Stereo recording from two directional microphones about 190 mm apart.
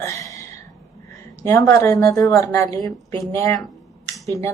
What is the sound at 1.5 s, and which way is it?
A woman's voice, 15° left (ahead or behind).